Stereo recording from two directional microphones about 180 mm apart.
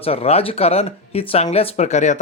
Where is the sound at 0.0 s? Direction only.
35° left (ahead or behind).